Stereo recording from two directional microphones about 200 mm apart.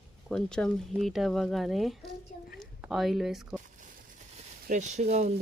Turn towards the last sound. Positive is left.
turn(degrees=-35)  # may be behind; listen again after turning